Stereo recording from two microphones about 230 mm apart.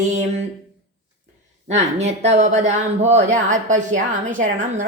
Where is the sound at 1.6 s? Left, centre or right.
Right.